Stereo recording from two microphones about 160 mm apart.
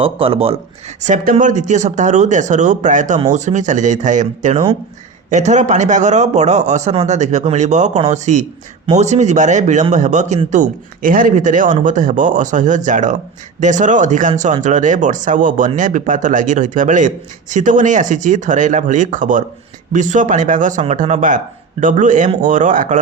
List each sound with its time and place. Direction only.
0.0 s speech: 35° right (ahead or behind)
1.0 s a man's voice: 60° right (ahead or behind)